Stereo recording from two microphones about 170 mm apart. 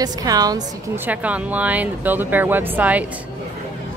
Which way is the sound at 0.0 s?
20° right (ahead or behind).